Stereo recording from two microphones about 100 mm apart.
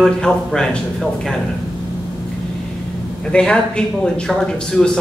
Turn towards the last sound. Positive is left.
turn(degrees=5)  # may be behind; listen again after turning